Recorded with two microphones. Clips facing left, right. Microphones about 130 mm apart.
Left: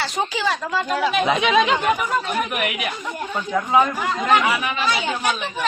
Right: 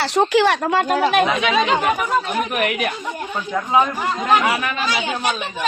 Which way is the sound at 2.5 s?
40° right (ahead or behind).